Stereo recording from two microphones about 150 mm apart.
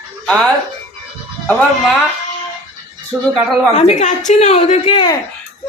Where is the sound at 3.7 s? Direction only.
50° left (ahead or behind).